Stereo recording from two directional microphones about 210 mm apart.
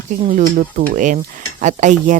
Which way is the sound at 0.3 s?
40° right (ahead or behind).